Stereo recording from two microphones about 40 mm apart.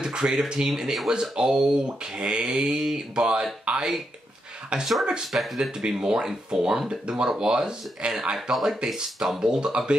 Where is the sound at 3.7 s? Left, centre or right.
Right.